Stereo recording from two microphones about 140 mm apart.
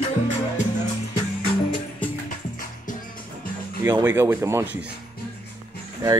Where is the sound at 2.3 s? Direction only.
70° left (ahead or behind).